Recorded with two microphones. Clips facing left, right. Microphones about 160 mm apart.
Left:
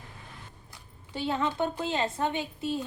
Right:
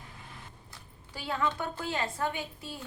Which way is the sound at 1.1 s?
25° left (ahead or behind).